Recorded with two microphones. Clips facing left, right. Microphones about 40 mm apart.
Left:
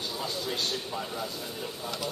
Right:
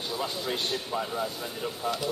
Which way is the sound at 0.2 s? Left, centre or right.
Right.